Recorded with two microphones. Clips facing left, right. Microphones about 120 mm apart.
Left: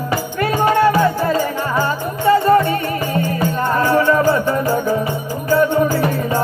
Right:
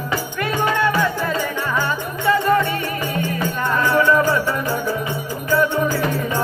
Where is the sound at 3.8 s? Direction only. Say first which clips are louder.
Left 1 dB; 45° left (ahead or behind).